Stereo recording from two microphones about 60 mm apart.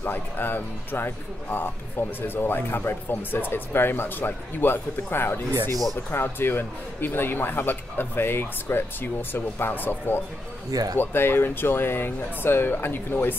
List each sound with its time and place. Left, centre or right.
0.0 s speech: left
10.7 s speech: right
11.0 s speech: left